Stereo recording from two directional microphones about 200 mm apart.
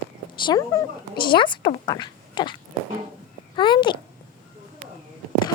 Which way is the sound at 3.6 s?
25° left (ahead or behind).